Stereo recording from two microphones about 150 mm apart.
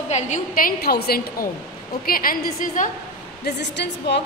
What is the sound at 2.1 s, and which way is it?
Speech, 75° left (ahead or behind).